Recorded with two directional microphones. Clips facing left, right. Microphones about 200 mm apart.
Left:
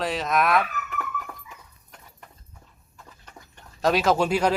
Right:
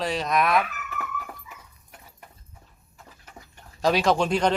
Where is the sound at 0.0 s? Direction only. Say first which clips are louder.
Even; centre (ahead or behind).